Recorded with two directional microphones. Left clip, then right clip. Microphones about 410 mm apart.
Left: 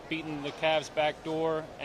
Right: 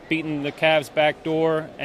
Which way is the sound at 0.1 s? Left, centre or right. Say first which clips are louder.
Right 10 dB; right.